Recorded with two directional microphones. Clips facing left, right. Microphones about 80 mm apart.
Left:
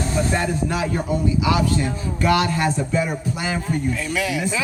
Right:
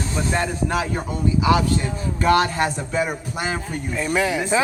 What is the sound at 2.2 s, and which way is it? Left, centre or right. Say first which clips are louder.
A man's voice: right 1 dB; right.